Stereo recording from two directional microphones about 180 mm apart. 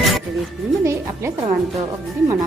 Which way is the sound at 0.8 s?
15° right (ahead or behind).